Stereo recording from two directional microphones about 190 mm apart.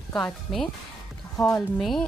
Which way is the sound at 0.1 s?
5° left (ahead or behind).